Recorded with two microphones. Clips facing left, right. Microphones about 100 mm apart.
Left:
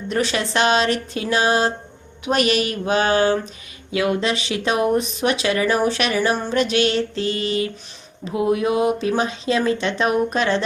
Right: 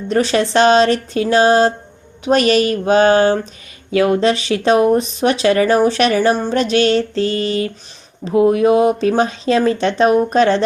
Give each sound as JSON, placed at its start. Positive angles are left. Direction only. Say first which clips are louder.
{"t": 0.1, "sound": "speech", "louder": "right 7 dB", "side_deg": -40}